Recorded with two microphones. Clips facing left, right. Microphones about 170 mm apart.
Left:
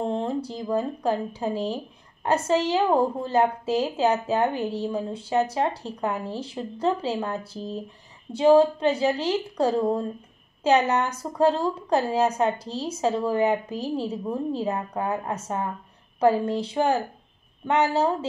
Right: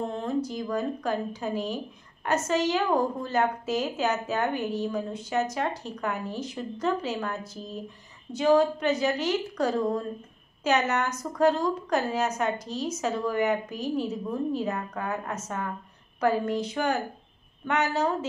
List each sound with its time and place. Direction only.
0.0 s a woman's voice: 30° left (ahead or behind)